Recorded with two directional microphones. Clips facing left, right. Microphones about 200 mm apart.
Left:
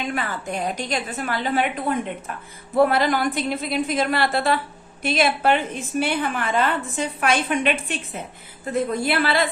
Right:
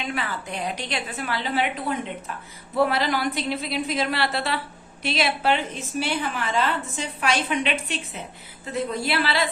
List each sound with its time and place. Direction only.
0.1 s a woman's voice: 45° left (ahead or behind)